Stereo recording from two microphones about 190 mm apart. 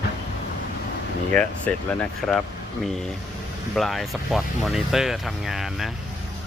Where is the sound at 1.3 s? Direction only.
10° left (ahead or behind).